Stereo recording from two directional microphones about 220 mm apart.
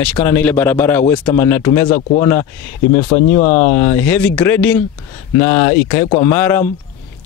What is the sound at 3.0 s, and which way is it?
Speech, 30° left (ahead or behind).